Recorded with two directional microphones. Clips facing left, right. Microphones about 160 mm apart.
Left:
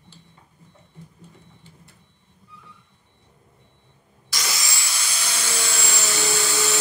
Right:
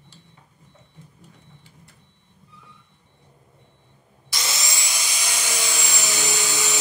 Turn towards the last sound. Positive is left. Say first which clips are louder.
# left 3 dB
turn(degrees=-15)  # may be behind; listen again after turning